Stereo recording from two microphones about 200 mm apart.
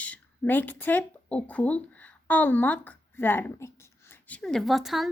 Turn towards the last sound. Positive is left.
turn(degrees=0)  # may be behind; listen again after turning